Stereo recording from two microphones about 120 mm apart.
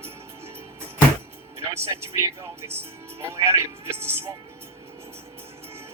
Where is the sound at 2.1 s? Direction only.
25° right (ahead or behind).